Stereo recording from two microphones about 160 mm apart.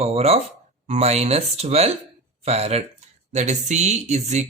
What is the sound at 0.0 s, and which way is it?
Speech, 40° right (ahead or behind).